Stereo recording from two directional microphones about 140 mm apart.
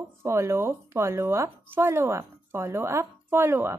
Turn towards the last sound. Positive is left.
turn(degrees=-15)  # may be behind; listen again after turning